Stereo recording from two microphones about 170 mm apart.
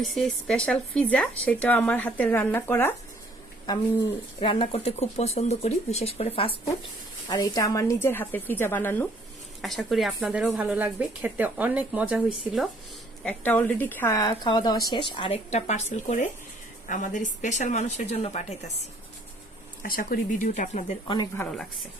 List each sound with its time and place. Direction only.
0.1 s speech: centre (ahead or behind)
3.7 s speech: 25° left (ahead or behind)
7.3 s speech: 25° left (ahead or behind)
9.6 s speech: centre (ahead or behind)
13.2 s speech: 10° left (ahead or behind); by 18.9 s 40° left (ahead or behind)
19.8 s speech: 60° left (ahead or behind)
20.5 s speech: 45° left (ahead or behind)